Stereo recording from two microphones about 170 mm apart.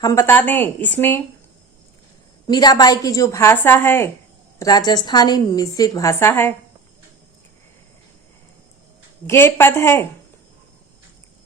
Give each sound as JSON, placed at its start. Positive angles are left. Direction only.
{"t": 0.0, "sound": "speech", "side_deg": 20}
{"t": 2.5, "sound": "a woman's voice", "side_deg": 25}
{"t": 4.6, "sound": "a woman's voice", "side_deg": 25}
{"t": 9.2, "sound": "speech", "side_deg": 15}